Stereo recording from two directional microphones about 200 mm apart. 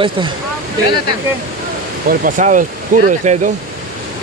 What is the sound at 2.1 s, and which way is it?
Speech, 40° right (ahead or behind).